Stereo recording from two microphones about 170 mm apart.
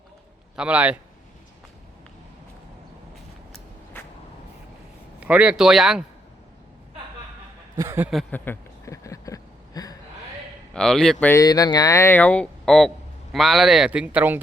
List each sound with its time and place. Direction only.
0.5 s a man's voice: 5° right (ahead or behind)
5.2 s speech: 5° right (ahead or behind)
7.8 s a man's voice: 15° right (ahead or behind)
8.3 s a sound: 15° left (ahead or behind)
10.8 s speech: 5° left (ahead or behind)